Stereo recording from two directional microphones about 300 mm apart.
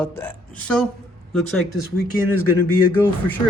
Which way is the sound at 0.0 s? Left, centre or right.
Centre.